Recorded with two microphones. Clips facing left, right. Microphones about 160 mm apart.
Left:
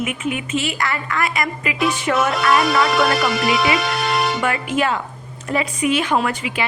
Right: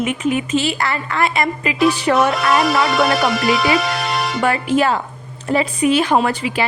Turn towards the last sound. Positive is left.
turn(degrees=-35)  # may be behind; listen again after turning